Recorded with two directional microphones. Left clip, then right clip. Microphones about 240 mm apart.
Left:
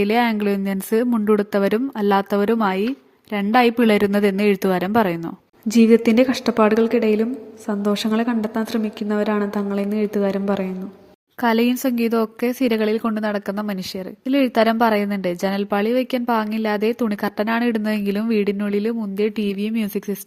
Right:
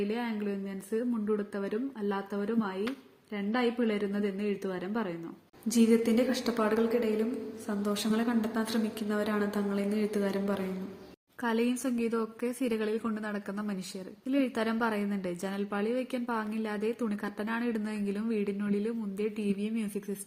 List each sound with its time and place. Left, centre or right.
0.0 s a woman's voice: left